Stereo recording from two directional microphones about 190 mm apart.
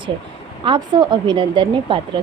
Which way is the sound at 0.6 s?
25° right (ahead or behind).